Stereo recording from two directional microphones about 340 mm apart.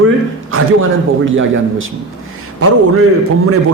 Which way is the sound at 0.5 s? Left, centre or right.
Right.